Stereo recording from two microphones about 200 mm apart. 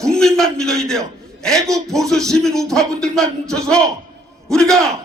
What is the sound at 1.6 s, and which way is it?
Music, 15° right (ahead or behind).